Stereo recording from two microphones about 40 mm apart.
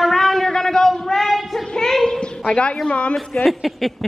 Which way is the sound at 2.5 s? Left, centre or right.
Left.